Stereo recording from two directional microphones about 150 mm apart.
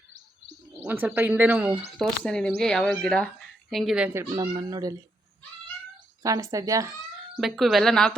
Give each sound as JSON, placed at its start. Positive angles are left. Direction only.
{"t": 0.8, "sound": "speech", "side_deg": -10}
{"t": 2.0, "sound": "speech", "side_deg": 5}
{"t": 4.1, "sound": "speech", "side_deg": -20}
{"t": 6.2, "sound": "speech", "side_deg": -20}
{"t": 7.3, "sound": "speech", "side_deg": 0}